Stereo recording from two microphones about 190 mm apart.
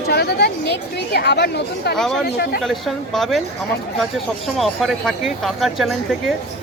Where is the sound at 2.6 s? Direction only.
Centre (ahead or behind).